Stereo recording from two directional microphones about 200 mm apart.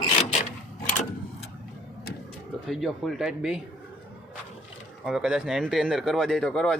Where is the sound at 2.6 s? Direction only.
Centre (ahead or behind).